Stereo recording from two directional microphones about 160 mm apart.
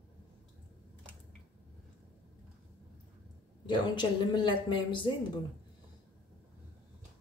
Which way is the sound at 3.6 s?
30° left (ahead or behind).